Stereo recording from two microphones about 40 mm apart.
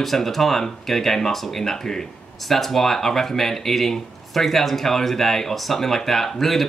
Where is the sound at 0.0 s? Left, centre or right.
Centre.